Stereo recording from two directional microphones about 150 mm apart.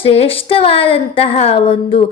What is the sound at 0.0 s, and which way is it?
A woman's voice, 40° left (ahead or behind).